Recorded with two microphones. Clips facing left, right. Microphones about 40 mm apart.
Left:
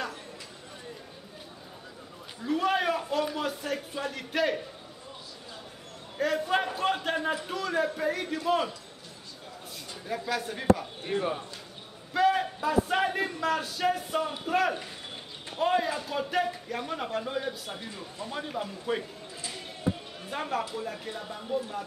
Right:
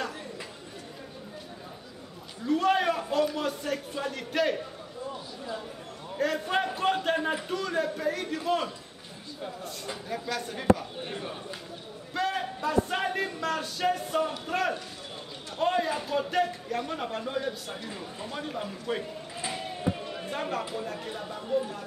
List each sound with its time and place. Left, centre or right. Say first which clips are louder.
2.4 s a man's voice: right 2 dB; centre
6.1 s a man's voice: left 1 dB; centre
10.0 s a man's voice: left 3 dB; centre
11.1 s speech: left 11 dB; left
12.1 s a man's voice: left 5 dB; centre
17.8 s speech: right 1 dB; centre
18.3 s a man's voice: left 1 dB; centre
20.2 s a man's voice: left 2 dB; centre